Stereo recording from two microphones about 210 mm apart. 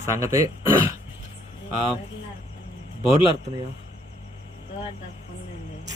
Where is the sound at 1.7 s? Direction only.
25° left (ahead or behind).